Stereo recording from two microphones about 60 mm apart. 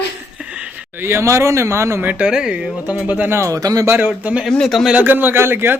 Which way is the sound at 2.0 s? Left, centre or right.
Right.